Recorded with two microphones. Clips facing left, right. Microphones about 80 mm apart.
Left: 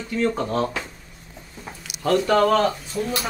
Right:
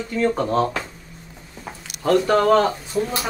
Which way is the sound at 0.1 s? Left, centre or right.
Right.